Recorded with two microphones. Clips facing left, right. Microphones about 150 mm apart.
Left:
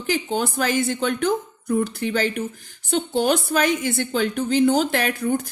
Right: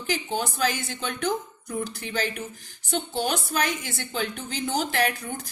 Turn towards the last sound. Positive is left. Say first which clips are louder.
# left 4 dB
turn(degrees=50)  # may be behind; listen again after turning